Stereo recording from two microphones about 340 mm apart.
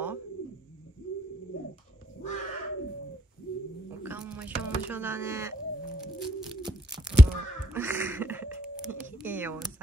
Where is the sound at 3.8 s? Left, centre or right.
Centre.